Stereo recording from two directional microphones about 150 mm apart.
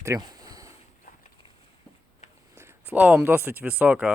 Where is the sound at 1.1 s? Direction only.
60° left (ahead or behind).